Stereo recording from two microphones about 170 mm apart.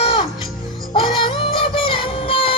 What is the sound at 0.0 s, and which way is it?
Music, 30° left (ahead or behind).